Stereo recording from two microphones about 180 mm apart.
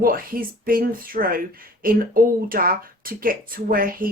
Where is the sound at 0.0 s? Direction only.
55° right (ahead or behind).